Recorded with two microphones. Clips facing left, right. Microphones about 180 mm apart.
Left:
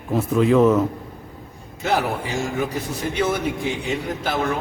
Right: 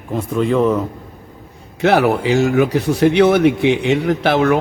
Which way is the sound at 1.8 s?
75° right (ahead or behind).